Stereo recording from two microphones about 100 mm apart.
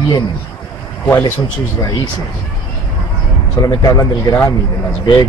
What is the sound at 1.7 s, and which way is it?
Speech, 40° left (ahead or behind).